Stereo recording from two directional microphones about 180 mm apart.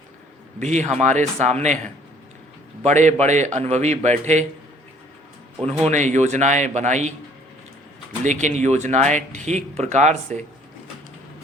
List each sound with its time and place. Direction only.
0.6 s speech: 40° right (ahead or behind)
2.8 s speech: 40° right (ahead or behind)
5.6 s speech: 40° right (ahead or behind)
8.2 s speech: 40° right (ahead or behind)